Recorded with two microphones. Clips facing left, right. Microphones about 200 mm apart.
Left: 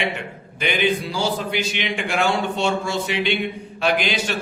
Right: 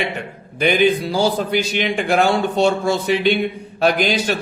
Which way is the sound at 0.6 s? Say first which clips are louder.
Right 6 dB; 40° right (ahead or behind).